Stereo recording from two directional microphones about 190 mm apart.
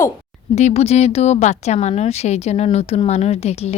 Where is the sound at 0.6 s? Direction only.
35° left (ahead or behind).